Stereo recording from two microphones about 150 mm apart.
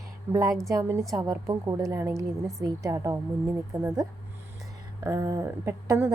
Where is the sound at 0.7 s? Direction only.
20° right (ahead or behind).